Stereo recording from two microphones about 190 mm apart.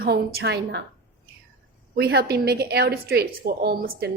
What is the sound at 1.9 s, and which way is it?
A woman's voice, 55° right (ahead or behind).